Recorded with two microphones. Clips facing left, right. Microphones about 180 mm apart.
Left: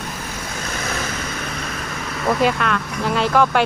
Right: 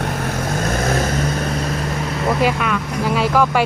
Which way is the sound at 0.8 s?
45° right (ahead or behind).